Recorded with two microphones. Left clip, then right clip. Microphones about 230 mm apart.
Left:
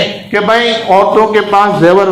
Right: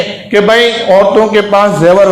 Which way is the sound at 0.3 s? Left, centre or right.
Right.